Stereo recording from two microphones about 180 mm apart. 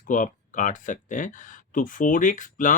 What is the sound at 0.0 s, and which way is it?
Speech, 45° left (ahead or behind).